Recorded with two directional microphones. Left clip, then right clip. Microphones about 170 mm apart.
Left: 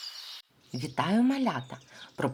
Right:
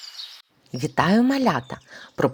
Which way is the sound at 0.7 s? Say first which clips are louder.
Right 9 dB; 35° right (ahead or behind).